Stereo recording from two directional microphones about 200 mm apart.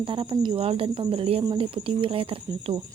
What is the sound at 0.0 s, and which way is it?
Speech, 25° right (ahead or behind).